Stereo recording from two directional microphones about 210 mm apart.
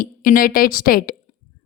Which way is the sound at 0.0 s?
40° left (ahead or behind).